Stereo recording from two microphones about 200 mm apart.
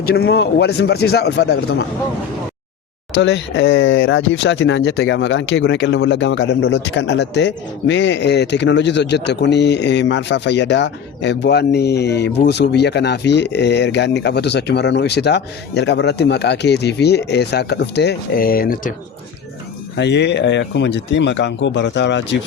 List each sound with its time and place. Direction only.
0.0 s speech: 55° left (ahead or behind)
3.1 s speech: 60° left (ahead or behind); by 18.9 s 45° left (ahead or behind)
20.0 s speech: 60° left (ahead or behind)